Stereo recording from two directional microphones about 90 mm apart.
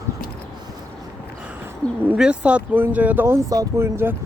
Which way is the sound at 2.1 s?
10° right (ahead or behind).